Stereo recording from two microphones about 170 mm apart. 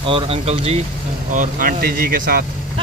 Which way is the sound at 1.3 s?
55° right (ahead or behind).